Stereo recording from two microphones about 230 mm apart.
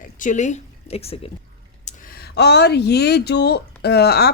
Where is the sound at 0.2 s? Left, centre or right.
Left.